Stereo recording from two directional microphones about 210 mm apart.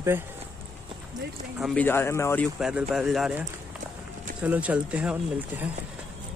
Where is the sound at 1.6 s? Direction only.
5° left (ahead or behind).